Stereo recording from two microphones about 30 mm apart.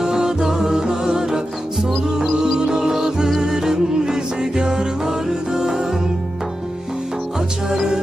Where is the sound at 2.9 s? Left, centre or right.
Centre.